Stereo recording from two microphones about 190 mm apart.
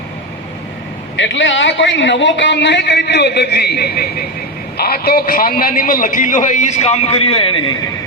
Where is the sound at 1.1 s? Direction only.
75° left (ahead or behind); by 7.7 s 25° left (ahead or behind).